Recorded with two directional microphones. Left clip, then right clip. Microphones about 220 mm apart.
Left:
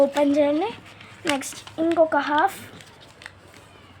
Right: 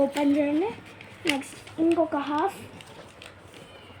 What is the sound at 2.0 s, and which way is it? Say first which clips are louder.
Speech: left 7 dB; 40° left (ahead or behind).